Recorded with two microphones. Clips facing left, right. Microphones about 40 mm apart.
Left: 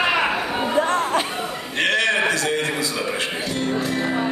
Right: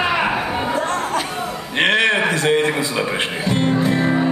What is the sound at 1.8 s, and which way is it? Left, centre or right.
Music, right.